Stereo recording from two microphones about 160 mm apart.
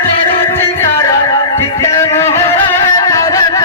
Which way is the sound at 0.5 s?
20° left (ahead or behind).